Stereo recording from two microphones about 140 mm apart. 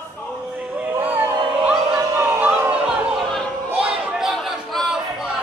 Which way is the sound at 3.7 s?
5° right (ahead or behind).